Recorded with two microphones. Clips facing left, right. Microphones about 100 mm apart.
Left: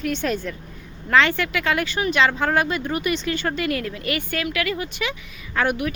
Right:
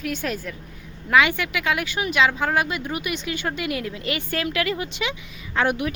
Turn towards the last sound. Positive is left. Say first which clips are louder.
# even
turn(degrees=-25)  # may be behind; listen again after turning